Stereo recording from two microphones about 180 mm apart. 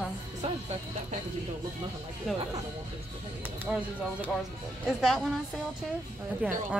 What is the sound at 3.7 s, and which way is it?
Speech, 10° right (ahead or behind).